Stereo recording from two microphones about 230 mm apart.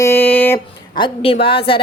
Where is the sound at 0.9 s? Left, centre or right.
Left.